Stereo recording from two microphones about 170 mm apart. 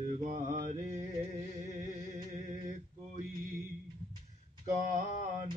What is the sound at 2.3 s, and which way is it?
Mantra, 45° right (ahead or behind).